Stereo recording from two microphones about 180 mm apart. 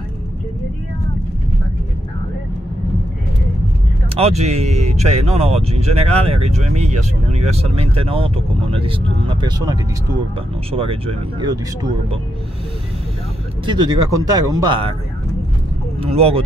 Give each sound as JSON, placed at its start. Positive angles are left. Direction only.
{"t": 4.2, "sound": "speech", "side_deg": -35}
{"t": 13.7, "sound": "speech", "side_deg": -25}
{"t": 16.0, "sound": "speech", "side_deg": -35}